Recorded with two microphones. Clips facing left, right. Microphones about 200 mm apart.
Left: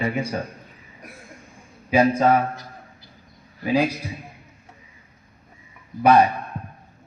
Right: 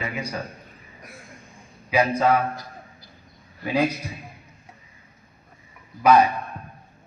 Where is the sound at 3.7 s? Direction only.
15° left (ahead or behind).